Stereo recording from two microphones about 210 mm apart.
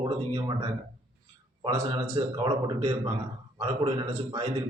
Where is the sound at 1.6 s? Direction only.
25° right (ahead or behind).